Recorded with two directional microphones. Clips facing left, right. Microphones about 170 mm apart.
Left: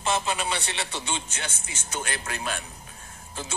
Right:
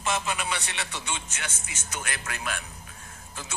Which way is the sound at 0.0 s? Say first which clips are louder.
Left 2 dB; 30° left (ahead or behind).